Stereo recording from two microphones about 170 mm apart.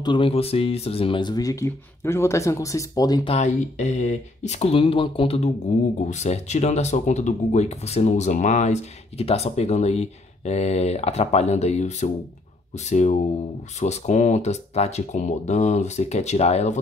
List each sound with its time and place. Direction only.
0.0 s speech: 30° left (ahead or behind)
3.3 s speech: 40° left (ahead or behind)
13.7 s speech: 45° left (ahead or behind)